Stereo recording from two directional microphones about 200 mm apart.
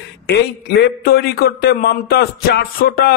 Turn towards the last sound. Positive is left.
turn(degrees=50)  # may be behind; listen again after turning